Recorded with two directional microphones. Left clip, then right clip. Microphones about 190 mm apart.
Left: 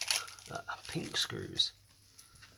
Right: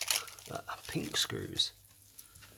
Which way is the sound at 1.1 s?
60° right (ahead or behind).